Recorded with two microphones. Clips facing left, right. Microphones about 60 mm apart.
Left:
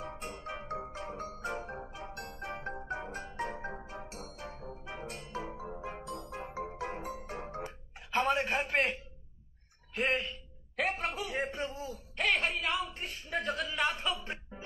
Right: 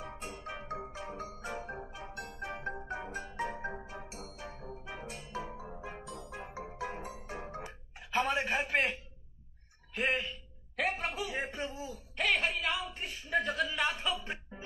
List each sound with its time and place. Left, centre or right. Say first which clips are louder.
0.0 s music: left 1 dB; centre
0.9 s marimba: left 1 dB; centre
2.3 s music: right 1 dB; centre
3.3 s marimba: right 1 dB; centre
4.4 s music: left 1 dB; centre
9.9 s a woman's voice: left 1 dB; centre